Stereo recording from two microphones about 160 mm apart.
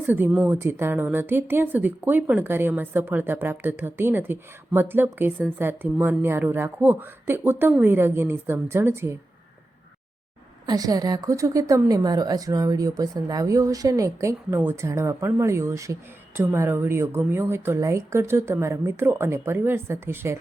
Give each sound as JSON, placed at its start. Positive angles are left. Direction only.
{"t": 0.1, "sound": "speech", "side_deg": -10}
{"t": 10.7, "sound": "a woman's voice", "side_deg": -25}